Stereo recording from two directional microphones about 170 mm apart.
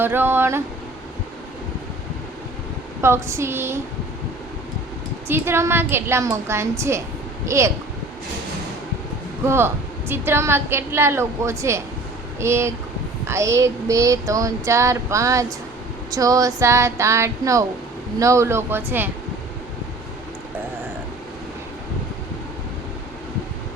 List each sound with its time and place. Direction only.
0.0 s a woman's voice: 15° right (ahead or behind)
3.0 s a woman's voice: 15° right (ahead or behind)
5.3 s a woman's voice: 15° right (ahead or behind)
9.5 s a woman's voice: 15° right (ahead or behind)
13.2 s child singing: 15° right (ahead or behind)
16.1 s a woman's voice: 20° right (ahead or behind)